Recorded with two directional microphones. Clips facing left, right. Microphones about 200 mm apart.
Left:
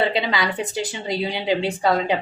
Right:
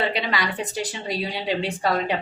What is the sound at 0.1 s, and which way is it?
Speech, 25° left (ahead or behind).